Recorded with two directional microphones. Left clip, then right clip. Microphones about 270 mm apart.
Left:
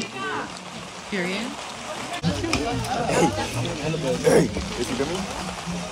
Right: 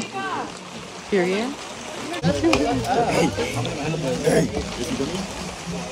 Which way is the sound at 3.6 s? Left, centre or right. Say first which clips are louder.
Right 1 dB; centre.